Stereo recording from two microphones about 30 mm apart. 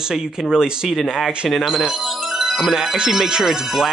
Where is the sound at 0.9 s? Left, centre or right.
Centre.